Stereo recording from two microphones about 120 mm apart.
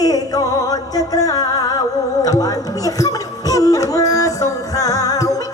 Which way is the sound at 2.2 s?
30° left (ahead or behind).